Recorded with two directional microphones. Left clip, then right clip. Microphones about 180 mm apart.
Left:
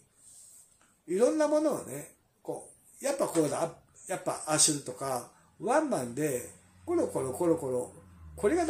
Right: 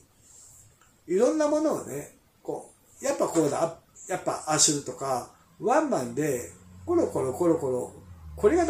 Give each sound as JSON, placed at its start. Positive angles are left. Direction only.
{"t": 1.0, "sound": "a man's voice", "side_deg": 20}